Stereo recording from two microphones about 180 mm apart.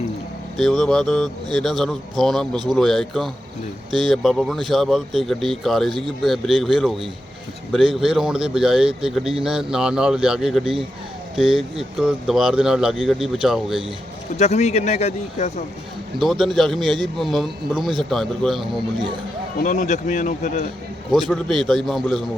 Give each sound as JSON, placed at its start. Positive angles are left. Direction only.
{"t": 0.5, "sound": "speech", "side_deg": 0}
{"t": 11.8, "sound": "speech", "side_deg": 0}
{"t": 14.3, "sound": "speech", "side_deg": 40}
{"t": 16.2, "sound": "speech", "side_deg": 0}
{"t": 19.5, "sound": "speech", "side_deg": 45}
{"t": 21.2, "sound": "speech", "side_deg": 0}